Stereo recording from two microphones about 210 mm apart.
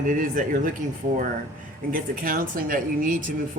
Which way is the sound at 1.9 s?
40° right (ahead or behind).